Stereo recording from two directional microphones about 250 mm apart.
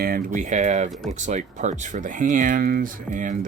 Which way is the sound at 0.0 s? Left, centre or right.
Right.